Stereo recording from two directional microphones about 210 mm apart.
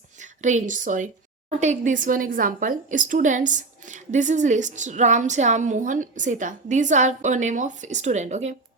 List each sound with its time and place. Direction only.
0.2 s a woman's voice: 35° right (ahead or behind)